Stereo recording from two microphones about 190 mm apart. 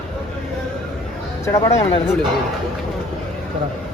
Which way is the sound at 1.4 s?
15° left (ahead or behind).